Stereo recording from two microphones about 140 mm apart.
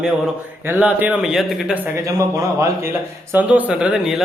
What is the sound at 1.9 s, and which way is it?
Speech, 20° right (ahead or behind).